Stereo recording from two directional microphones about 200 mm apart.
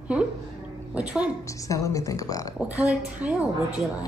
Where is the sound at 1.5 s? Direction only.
15° left (ahead or behind).